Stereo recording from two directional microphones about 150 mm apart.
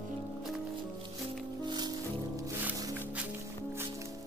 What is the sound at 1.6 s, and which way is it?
Music, 30° right (ahead or behind).